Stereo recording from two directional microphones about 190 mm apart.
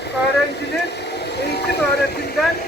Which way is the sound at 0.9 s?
60° left (ahead or behind).